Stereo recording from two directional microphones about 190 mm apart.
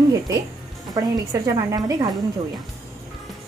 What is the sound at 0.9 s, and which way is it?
Speech, 20° right (ahead or behind).